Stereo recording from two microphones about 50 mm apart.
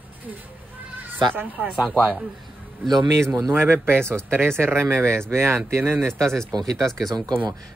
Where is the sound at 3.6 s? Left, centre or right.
Right.